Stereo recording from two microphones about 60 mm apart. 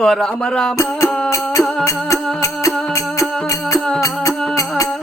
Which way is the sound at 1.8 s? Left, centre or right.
Left.